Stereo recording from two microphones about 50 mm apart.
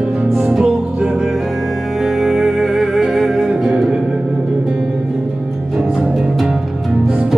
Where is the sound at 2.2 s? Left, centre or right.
Centre.